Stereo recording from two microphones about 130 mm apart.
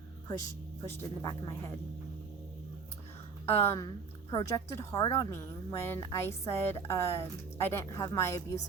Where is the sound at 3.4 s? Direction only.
20° left (ahead or behind).